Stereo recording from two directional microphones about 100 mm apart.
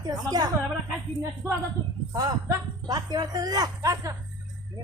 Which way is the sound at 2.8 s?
45° right (ahead or behind).